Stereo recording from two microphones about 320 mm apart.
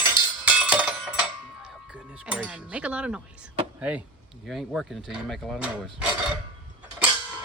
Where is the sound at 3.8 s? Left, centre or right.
Centre.